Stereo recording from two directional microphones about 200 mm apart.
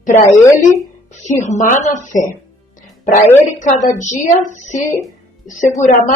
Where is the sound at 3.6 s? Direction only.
40° left (ahead or behind).